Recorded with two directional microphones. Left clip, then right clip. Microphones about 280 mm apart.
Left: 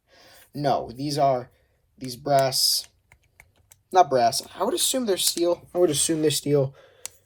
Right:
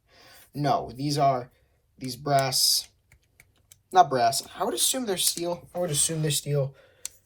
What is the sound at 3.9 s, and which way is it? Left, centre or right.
Speech, centre.